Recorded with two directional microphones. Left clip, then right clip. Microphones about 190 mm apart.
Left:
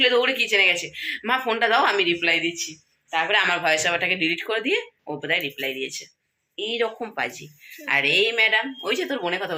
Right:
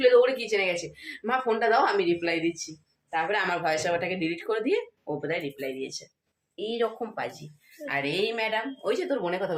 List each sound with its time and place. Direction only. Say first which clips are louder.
0.0 s speech: left 1 dB; centre (ahead or behind)
6.7 s a woman's voice: left 3 dB; 15° left (ahead or behind)